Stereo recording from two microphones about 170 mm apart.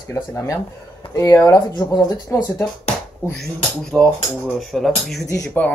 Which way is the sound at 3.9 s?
15° right (ahead or behind).